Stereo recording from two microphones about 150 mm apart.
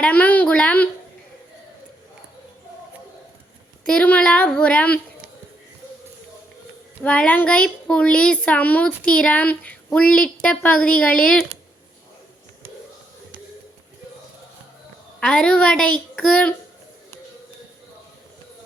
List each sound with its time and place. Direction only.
0.0 s speech: 10° left (ahead or behind)
3.8 s speech: 10° left (ahead or behind)
7.0 s speech: 5° left (ahead or behind)
15.2 s a woman's voice: 5° left (ahead or behind)